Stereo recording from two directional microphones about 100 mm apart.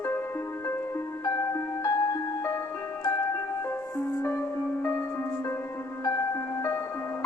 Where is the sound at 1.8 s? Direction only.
30° left (ahead or behind).